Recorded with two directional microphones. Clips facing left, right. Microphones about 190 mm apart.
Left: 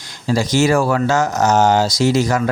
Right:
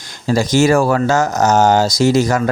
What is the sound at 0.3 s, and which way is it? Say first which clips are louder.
Speech: right 2 dB; 45° right (ahead or behind).